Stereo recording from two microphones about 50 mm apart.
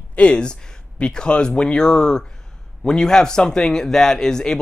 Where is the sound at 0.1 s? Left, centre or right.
Left.